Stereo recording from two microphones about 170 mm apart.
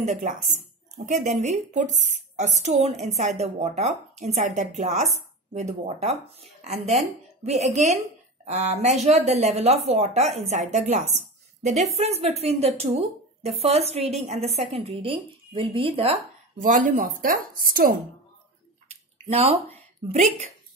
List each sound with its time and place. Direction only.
0.0 s speech: 45° right (ahead or behind)
16.6 s speech: 50° right (ahead or behind)
19.2 s speech: 35° right (ahead or behind)